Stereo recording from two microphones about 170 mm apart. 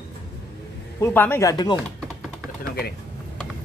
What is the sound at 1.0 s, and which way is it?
Speech, 10° left (ahead or behind).